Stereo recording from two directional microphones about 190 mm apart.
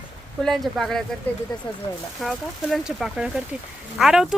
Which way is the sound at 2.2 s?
Centre (ahead or behind).